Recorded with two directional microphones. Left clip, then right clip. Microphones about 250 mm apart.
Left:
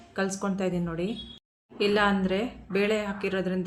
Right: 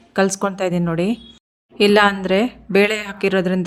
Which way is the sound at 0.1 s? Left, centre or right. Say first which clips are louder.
Right 12 dB; right.